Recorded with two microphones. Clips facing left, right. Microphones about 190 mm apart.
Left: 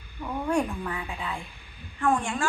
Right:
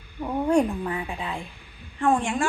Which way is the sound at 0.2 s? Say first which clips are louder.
Right 5 dB; 30° right (ahead or behind).